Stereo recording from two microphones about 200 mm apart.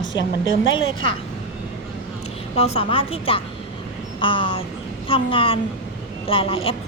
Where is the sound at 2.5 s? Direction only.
30° left (ahead or behind).